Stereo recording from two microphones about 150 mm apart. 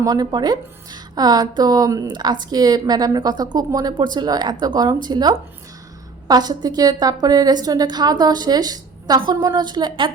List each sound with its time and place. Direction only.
0.0 s a woman's voice: 25° right (ahead or behind)